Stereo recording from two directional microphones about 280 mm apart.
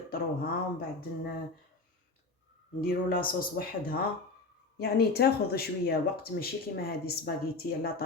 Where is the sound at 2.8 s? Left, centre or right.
Left.